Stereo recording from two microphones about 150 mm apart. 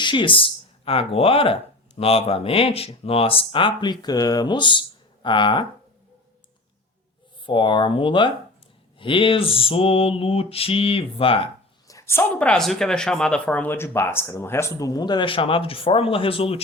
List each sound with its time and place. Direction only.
0.0 s speech: 30° left (ahead or behind)
2.0 s mantra: 40° left (ahead or behind)
4.0 s speech: 25° left (ahead or behind)
7.4 s mantra: 35° left (ahead or behind)
11.9 s speech: 20° left (ahead or behind); by 16.6 s 40° left (ahead or behind)